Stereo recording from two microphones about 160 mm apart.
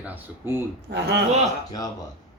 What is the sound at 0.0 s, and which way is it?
Speech, 10° right (ahead or behind).